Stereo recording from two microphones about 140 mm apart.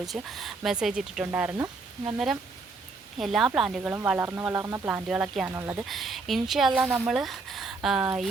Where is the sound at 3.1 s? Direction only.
Centre (ahead or behind).